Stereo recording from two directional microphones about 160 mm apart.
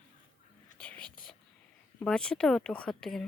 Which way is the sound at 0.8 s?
5° left (ahead or behind).